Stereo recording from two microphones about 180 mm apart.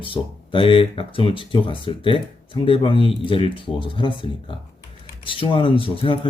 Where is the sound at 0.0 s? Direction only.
30° left (ahead or behind).